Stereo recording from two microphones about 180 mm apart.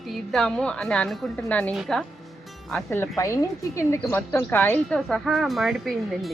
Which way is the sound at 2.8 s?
15° left (ahead or behind).